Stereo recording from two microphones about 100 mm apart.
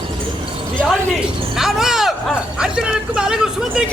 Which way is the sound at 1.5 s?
5° right (ahead or behind).